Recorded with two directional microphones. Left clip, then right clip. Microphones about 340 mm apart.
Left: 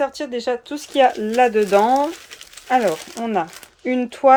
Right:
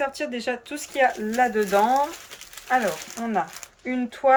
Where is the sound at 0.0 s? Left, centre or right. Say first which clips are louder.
Left 4 dB; centre.